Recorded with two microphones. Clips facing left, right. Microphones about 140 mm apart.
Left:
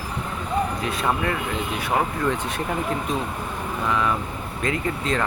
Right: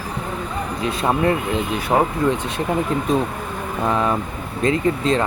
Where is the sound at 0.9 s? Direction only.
30° right (ahead or behind).